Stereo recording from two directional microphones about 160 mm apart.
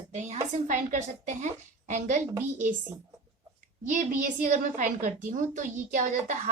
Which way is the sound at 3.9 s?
50° right (ahead or behind).